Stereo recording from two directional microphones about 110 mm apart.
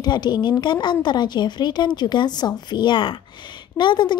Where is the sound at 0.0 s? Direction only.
40° left (ahead or behind).